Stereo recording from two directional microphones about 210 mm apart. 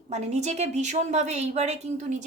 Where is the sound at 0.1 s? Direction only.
35° right (ahead or behind).